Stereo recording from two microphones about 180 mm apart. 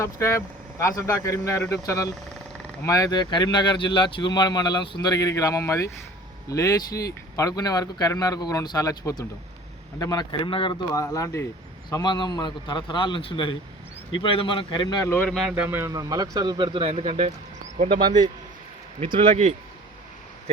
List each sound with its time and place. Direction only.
0.0 s speech: 15° left (ahead or behind); by 17.3 s 45° right (ahead or behind)
18.9 s a man's voice: 30° right (ahead or behind)
19.3 s speech: 40° right (ahead or behind)